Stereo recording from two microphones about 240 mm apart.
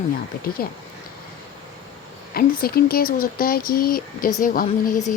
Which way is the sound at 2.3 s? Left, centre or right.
Left.